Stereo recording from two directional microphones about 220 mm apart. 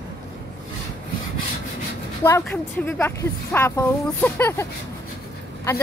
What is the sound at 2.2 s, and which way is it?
Speech, 10° left (ahead or behind).